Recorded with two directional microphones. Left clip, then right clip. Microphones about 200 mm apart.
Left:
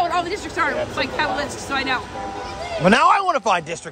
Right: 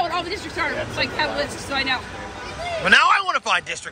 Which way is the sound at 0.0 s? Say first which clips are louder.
Left 3 dB; 5° left (ahead or behind).